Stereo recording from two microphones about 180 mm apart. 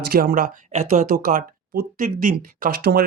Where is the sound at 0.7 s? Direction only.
40° right (ahead or behind).